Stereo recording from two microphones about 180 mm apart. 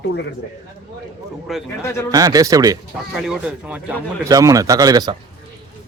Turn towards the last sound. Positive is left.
turn(degrees=-20)  # may be behind; listen again after turning